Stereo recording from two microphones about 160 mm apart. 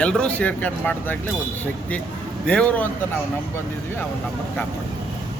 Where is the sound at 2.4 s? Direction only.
5° left (ahead or behind).